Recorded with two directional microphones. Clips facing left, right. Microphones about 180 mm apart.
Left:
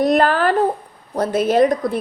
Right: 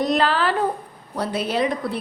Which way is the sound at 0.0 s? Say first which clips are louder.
Left 5 dB; 50° left (ahead or behind).